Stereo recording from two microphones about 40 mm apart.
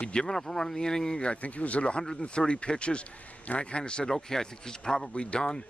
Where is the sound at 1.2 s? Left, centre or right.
Left.